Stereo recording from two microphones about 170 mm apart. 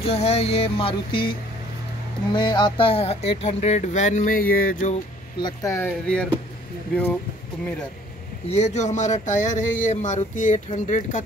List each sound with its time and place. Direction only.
0.0 s speech: 35° left (ahead or behind); by 4.9 s 55° left (ahead or behind)
5.4 s speech: 20° left (ahead or behind)
5.9 s speech: 5° left (ahead or behind)
8.5 s speech: 40° left (ahead or behind)